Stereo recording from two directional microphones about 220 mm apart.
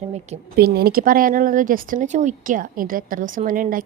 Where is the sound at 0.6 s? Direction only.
45° right (ahead or behind).